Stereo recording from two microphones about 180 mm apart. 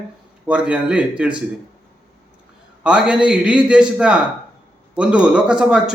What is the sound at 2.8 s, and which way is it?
Speech, 5° right (ahead or behind).